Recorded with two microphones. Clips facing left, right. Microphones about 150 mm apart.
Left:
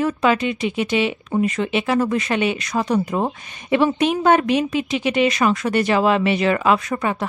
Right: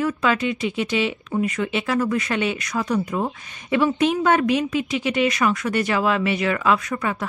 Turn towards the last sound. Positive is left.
turn(degrees=25)  # may be behind; listen again after turning